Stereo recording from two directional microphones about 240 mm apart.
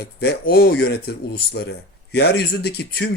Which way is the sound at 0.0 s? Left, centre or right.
Left.